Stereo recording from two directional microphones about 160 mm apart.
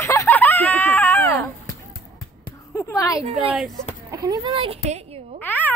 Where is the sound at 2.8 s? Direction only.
20° left (ahead or behind).